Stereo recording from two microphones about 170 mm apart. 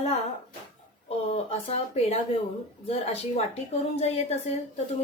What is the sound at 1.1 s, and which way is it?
A woman's voice, 35° left (ahead or behind).